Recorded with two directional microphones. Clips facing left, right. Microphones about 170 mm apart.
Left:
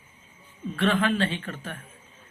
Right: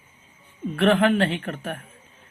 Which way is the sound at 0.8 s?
60° right (ahead or behind).